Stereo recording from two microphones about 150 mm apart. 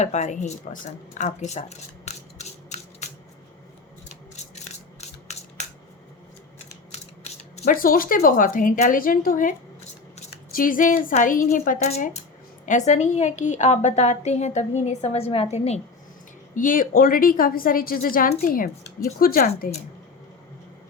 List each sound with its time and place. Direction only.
0.0 s a woman's voice: 50° left (ahead or behind)
2.0 s a sound: 50° left (ahead or behind)
4.5 s a sound: 45° left (ahead or behind)
6.9 s mechanisms: 45° left (ahead or behind)
7.6 s a woman's voice: 70° left (ahead or behind)
11.9 s a woman's voice: 45° left (ahead or behind)
16.6 s a woman's voice: 65° left (ahead or behind)